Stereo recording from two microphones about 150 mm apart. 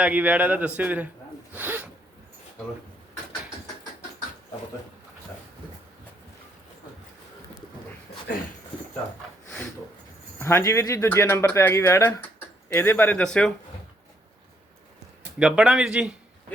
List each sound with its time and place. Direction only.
0.0 s speech: 10° right (ahead or behind)
1.5 s a sound: 10° right (ahead or behind)
10.4 s speech: 20° left (ahead or behind)
15.4 s speech: 5° right (ahead or behind)